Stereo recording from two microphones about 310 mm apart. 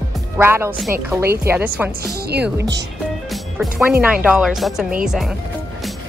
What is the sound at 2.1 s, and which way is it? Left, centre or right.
Speech, right.